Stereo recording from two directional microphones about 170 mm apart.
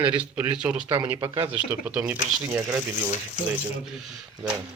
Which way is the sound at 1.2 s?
30° right (ahead or behind).